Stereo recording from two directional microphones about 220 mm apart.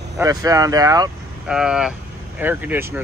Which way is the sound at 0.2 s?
15° right (ahead or behind).